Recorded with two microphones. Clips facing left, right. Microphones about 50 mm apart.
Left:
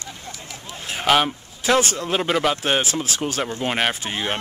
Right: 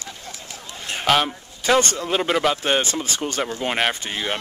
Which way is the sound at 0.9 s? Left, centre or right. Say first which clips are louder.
Left 1 dB; centre.